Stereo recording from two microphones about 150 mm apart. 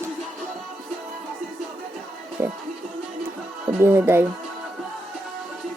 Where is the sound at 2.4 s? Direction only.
15° right (ahead or behind).